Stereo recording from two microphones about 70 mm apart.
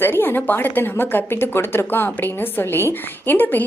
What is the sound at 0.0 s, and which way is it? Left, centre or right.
A woman's voice, left.